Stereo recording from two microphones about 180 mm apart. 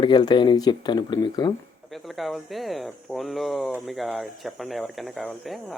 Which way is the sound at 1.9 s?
Centre (ahead or behind).